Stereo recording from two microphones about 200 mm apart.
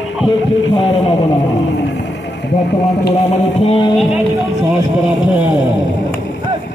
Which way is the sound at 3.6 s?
25° left (ahead or behind).